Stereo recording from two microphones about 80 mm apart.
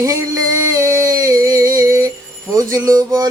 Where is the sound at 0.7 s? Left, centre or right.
Right.